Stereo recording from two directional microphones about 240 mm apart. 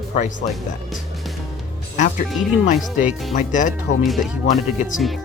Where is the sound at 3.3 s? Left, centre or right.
Left.